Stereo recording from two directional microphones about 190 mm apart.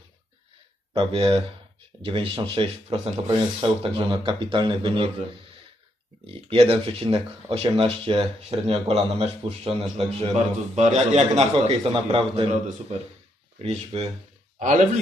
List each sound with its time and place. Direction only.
0.9 s speech: 30° right (ahead or behind)
6.2 s speech: 30° right (ahead or behind)
13.6 s speech: 35° right (ahead or behind)